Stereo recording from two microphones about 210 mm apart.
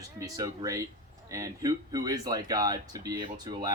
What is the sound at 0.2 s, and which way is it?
A child's voice, 15° right (ahead or behind).